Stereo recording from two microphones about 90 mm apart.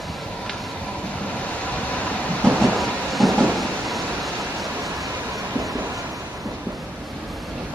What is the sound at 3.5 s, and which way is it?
Vehicle, centre (ahead or behind).